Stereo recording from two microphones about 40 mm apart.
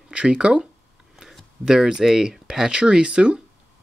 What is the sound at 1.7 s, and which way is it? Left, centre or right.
Speech, centre.